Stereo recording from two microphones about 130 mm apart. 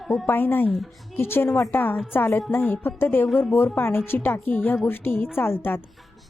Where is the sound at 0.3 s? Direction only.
15° left (ahead or behind).